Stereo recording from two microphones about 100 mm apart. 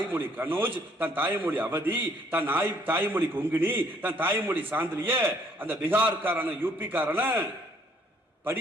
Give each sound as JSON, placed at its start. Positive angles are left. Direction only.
{"t": 0.1, "sound": "a man's voice", "side_deg": -20}